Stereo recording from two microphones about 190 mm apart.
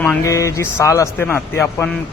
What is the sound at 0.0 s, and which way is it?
A man's voice, 10° left (ahead or behind).